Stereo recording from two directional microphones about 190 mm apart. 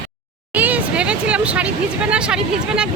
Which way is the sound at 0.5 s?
10° right (ahead or behind).